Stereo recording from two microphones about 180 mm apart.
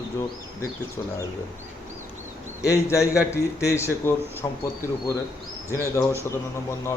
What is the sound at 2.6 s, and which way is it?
A man's voice, 15° left (ahead or behind).